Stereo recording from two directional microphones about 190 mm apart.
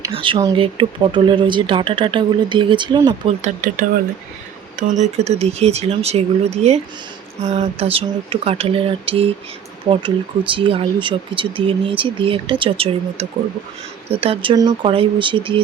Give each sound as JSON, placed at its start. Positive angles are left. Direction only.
{"t": 0.1, "sound": "speech", "side_deg": -25}
{"t": 4.8, "sound": "speech", "side_deg": -40}